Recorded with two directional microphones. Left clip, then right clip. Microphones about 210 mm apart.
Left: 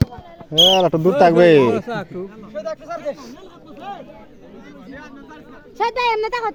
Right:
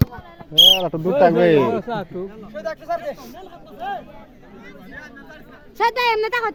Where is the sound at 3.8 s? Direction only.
40° right (ahead or behind).